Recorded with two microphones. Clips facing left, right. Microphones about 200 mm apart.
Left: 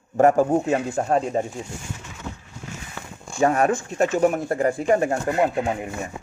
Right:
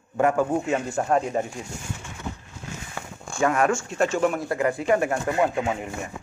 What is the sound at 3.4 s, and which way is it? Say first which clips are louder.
Speech: left 2 dB; 35° left (ahead or behind).